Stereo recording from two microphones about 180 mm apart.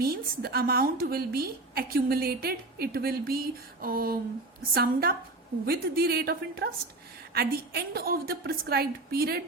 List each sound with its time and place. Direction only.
0.0 s a woman's voice: 60° right (ahead or behind)